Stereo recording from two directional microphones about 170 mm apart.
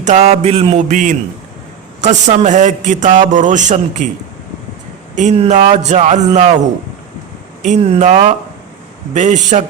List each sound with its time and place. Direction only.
0.0 s a man's voice: 40° right (ahead or behind)
5.1 s a man's voice: 40° right (ahead or behind)